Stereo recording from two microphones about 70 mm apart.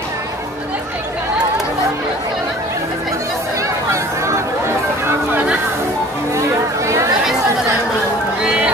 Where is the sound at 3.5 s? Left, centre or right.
Right.